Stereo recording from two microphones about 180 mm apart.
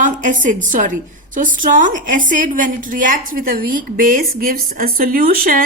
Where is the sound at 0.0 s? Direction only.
45° right (ahead or behind).